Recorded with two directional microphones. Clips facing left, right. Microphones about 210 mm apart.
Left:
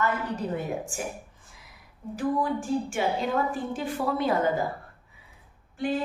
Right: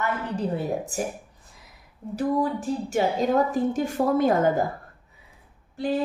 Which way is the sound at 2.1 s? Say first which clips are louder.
Right 3 dB; 40° right (ahead or behind).